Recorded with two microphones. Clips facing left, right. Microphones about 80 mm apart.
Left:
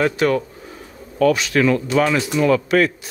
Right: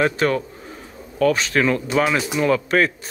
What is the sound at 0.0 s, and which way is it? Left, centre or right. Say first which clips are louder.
Speech: left 1 dB; right.